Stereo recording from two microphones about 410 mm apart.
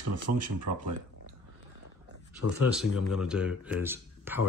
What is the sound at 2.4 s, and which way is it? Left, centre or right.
Speech, left.